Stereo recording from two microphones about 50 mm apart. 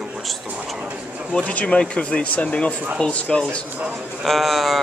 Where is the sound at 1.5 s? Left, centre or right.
Left.